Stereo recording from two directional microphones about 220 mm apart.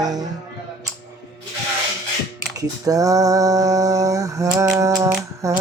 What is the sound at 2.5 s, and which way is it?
Music, 15° right (ahead or behind).